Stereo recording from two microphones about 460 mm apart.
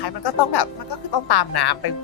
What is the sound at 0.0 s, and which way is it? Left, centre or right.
Speech, left.